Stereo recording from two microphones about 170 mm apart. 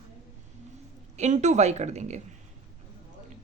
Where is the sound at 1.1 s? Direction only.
45° right (ahead or behind).